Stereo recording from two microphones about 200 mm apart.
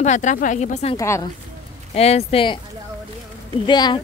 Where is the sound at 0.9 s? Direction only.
15° left (ahead or behind).